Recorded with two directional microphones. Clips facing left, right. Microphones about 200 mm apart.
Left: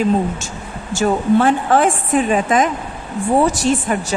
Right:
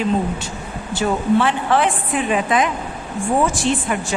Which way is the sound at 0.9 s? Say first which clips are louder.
Left 3 dB; 45° left (ahead or behind).